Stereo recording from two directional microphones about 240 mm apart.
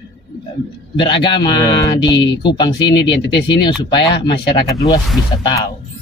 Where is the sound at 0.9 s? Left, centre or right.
Centre.